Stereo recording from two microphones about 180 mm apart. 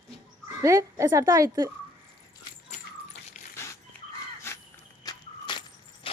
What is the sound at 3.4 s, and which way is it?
Dog, 40° left (ahead or behind).